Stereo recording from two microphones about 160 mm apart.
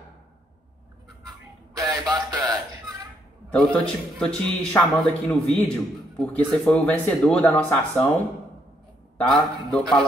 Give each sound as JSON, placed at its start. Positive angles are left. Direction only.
{"t": 1.8, "sound": "a sound", "side_deg": -25}
{"t": 3.5, "sound": "a man's voice", "side_deg": 5}
{"t": 9.2, "sound": "a man's voice", "side_deg": 5}